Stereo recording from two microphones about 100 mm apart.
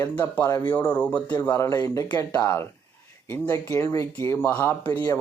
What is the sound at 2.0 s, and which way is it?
Speech, 40° left (ahead or behind).